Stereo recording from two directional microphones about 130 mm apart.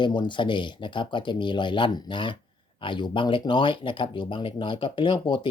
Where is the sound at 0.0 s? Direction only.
35° left (ahead or behind).